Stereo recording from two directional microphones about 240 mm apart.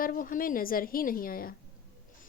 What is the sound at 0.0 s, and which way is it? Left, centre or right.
A woman's voice, left.